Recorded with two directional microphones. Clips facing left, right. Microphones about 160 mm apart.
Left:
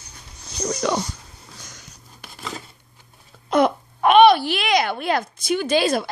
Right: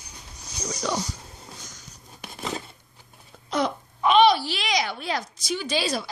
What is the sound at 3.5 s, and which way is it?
Speech, 55° left (ahead or behind).